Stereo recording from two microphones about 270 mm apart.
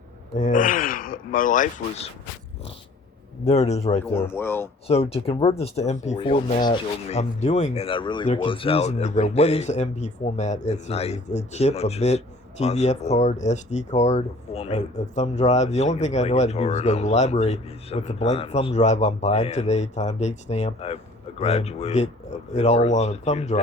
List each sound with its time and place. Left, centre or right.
0.3 s speech: left
3.4 s speech: left
4.0 s speech: centre
4.9 s speech: left